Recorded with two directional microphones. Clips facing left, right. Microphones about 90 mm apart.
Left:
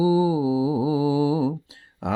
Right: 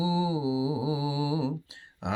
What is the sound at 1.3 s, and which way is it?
Music, 40° left (ahead or behind).